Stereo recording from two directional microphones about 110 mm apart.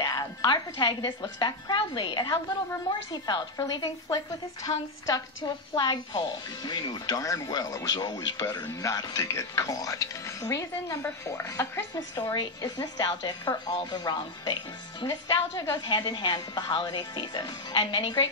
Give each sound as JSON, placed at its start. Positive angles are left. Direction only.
{"t": 0.0, "sound": "a woman's voice", "side_deg": 35}
{"t": 4.7, "sound": "a woman's voice", "side_deg": 55}
{"t": 5.0, "sound": "speech", "side_deg": 40}
{"t": 11.9, "sound": "a woman's voice", "side_deg": 35}
{"t": 15.0, "sound": "speech", "side_deg": 25}
{"t": 15.7, "sound": "a woman's voice", "side_deg": 45}